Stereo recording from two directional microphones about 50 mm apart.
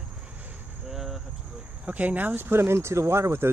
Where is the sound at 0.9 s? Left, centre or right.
Centre.